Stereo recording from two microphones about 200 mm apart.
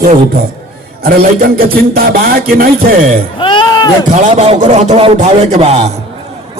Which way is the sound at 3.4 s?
25° left (ahead or behind).